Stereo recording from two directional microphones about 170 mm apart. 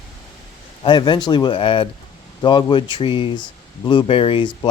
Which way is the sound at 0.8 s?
25° left (ahead or behind).